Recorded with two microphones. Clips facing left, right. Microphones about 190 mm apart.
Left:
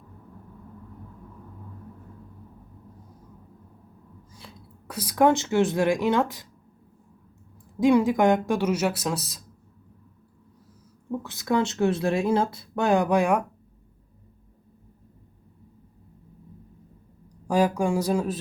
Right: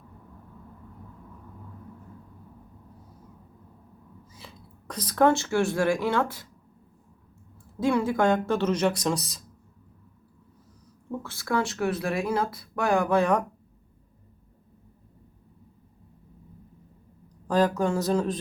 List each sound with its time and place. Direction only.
4.4 s speech: centre (ahead or behind); by 6.5 s 15° left (ahead or behind)
7.8 s speech: 15° left (ahead or behind)
11.2 s speech: 20° left (ahead or behind)
17.5 s speech: 10° left (ahead or behind)